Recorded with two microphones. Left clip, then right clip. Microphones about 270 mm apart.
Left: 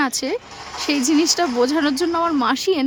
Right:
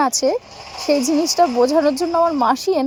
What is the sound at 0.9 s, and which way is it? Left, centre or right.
A woman's voice, centre.